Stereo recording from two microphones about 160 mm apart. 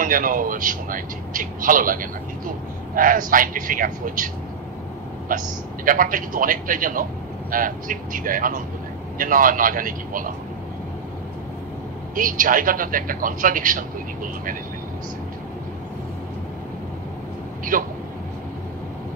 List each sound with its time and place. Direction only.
0.0 s a man's voice: 60° right (ahead or behind)
5.3 s a man's voice: 60° right (ahead or behind)
12.2 s a man's voice: 60° right (ahead or behind)
17.7 s a man's voice: 55° right (ahead or behind)